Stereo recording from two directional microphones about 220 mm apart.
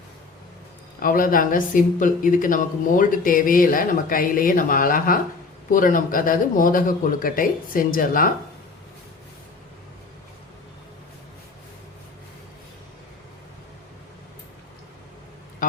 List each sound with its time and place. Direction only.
0.9 s speech: 40° left (ahead or behind)